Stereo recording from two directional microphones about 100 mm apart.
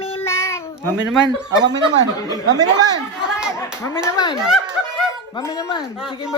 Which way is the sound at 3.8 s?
30° left (ahead or behind).